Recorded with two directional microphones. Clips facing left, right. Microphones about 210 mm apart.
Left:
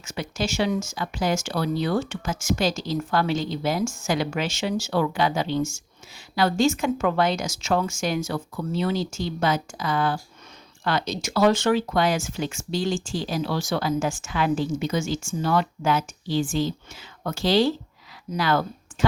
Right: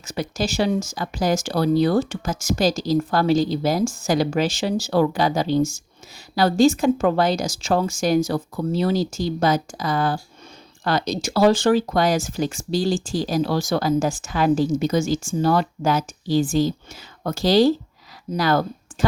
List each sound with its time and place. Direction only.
0.0 s speech: 35° right (ahead or behind)